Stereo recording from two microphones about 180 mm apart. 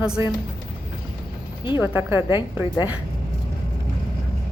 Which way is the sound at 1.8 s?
10° right (ahead or behind).